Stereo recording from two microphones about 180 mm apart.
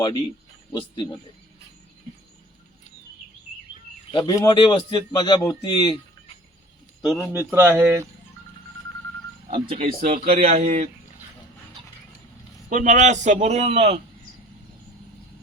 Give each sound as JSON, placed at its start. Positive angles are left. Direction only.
{"t": 0.7, "sound": "a man's voice", "side_deg": 25}
{"t": 4.1, "sound": "a man's voice", "side_deg": 25}
{"t": 7.0, "sound": "speech", "side_deg": -5}
{"t": 9.5, "sound": "a man's voice", "side_deg": -30}
{"t": 12.6, "sound": "a man's voice", "side_deg": -45}